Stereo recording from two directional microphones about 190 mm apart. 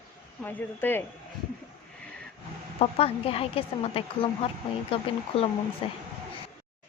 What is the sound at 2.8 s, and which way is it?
A woman's voice, 30° left (ahead or behind).